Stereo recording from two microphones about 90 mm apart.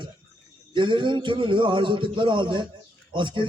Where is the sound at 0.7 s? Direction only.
60° right (ahead or behind).